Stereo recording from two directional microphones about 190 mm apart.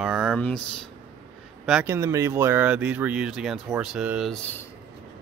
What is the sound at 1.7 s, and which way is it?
Speech, 5° right (ahead or behind).